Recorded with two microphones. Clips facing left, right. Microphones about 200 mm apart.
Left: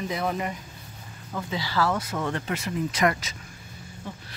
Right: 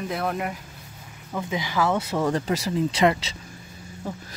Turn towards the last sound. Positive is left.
turn(degrees=-45)  # may be behind; listen again after turning